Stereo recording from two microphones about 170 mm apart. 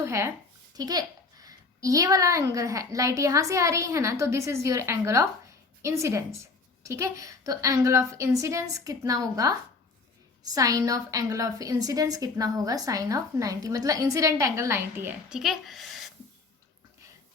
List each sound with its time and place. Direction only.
0.0 s a sound: 15° right (ahead or behind)
0.8 s a woman's voice: 20° right (ahead or behind)
15.3 s speech: centre (ahead or behind)